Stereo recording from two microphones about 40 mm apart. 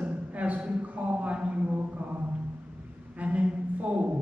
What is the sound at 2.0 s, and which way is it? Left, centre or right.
Music, right.